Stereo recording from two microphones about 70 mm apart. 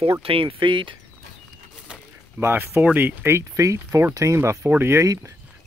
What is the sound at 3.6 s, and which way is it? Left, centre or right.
Speech, right.